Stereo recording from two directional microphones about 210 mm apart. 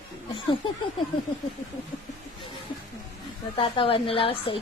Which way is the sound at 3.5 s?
25° left (ahead or behind).